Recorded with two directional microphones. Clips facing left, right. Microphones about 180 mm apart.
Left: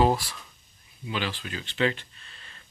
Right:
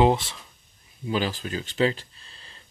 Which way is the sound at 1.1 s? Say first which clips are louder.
Right 5 dB; 40° right (ahead or behind).